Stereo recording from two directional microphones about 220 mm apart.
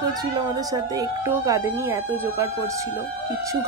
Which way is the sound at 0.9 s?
15° right (ahead or behind).